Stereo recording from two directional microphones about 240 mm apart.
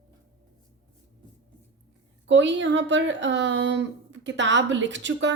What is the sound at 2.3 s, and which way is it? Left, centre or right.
Speech, right.